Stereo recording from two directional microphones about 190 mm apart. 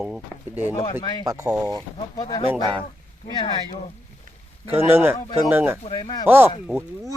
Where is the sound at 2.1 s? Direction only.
20° left (ahead or behind).